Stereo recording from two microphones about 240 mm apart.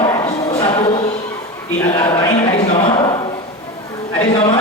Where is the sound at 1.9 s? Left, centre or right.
Left.